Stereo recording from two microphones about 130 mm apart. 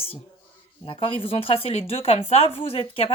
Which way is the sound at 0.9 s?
45° left (ahead or behind).